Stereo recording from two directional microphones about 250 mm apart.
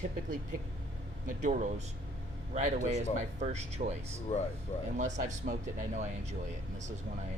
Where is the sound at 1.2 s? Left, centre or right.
Right.